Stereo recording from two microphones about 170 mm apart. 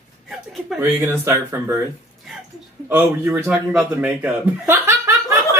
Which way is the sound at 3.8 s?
5° right (ahead or behind).